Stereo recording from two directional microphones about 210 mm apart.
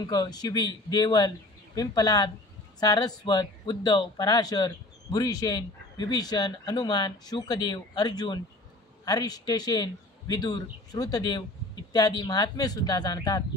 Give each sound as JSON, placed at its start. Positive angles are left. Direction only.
{"t": 0.0, "sound": "a man's voice", "side_deg": 20}